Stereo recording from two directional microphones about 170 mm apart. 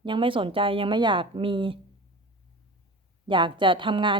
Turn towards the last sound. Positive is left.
turn(degrees=-30)  # may be behind; listen again after turning